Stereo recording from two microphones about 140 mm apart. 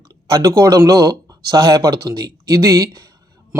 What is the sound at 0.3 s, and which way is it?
A man's voice, 20° right (ahead or behind).